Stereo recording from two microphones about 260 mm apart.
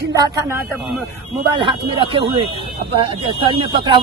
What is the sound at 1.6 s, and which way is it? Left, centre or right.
Speech, centre.